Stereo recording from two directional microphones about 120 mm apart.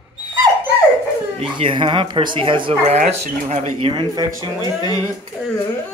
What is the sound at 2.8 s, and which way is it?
Speech, 65° right (ahead or behind).